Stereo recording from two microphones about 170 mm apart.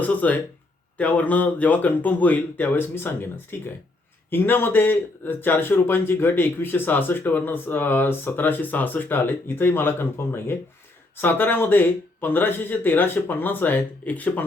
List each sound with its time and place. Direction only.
0.0 s a man's voice: 10° left (ahead or behind)